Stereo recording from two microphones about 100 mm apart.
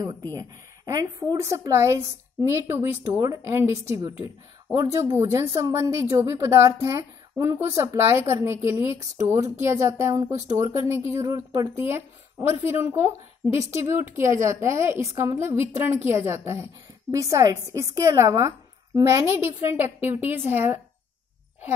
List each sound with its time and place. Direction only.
0.4 s a woman's voice: 35° right (ahead or behind)
11.8 s a woman's voice: 25° right (ahead or behind)